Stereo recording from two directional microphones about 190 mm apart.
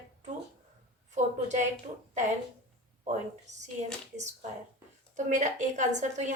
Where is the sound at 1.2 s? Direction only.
40° right (ahead or behind).